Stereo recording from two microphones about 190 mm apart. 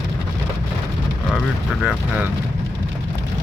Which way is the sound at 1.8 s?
5° right (ahead or behind).